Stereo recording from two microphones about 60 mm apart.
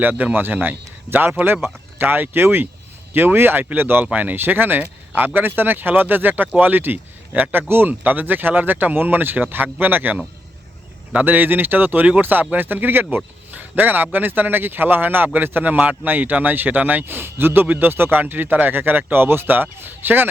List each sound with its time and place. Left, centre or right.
0.0 s speech: right